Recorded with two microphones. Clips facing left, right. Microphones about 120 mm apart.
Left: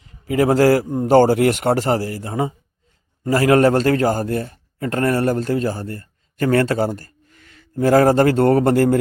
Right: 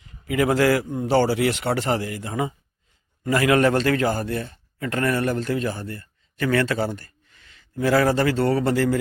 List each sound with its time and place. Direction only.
0.0 s a man's voice: 35° left (ahead or behind); by 9.0 s 50° left (ahead or behind)